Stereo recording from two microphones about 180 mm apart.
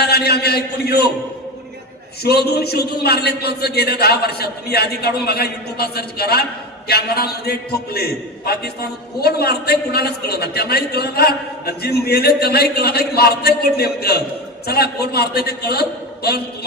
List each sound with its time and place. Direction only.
0.0 s a man's voice: 65° left (ahead or behind)
2.2 s a man's voice: 65° left (ahead or behind)